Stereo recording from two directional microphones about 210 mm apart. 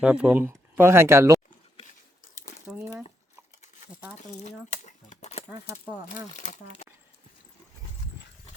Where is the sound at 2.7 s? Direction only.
5° right (ahead or behind).